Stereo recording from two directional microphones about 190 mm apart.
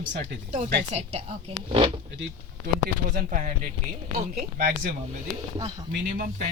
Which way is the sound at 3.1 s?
45° right (ahead or behind).